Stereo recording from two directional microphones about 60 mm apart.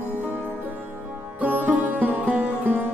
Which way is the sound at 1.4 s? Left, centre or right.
Right.